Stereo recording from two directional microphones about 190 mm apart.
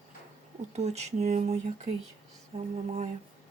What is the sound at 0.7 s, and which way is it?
Speech, 35° right (ahead or behind).